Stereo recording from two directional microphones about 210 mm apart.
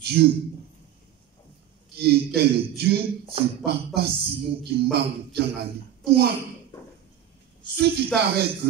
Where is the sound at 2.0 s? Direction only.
50° right (ahead or behind).